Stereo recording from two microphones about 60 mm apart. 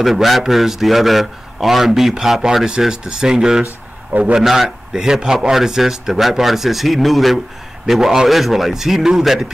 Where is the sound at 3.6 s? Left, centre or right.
Right.